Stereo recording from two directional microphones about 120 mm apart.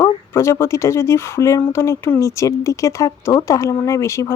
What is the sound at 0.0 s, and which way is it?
Speech, 25° left (ahead or behind).